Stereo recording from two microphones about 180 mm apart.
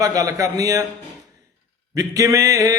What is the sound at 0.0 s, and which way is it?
Speech, 20° right (ahead or behind).